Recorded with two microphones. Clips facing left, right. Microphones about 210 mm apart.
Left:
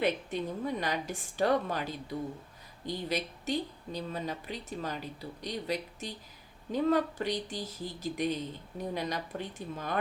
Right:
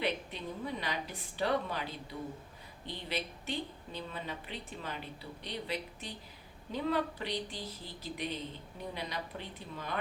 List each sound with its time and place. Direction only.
0.0 s a woman's voice: 45° left (ahead or behind)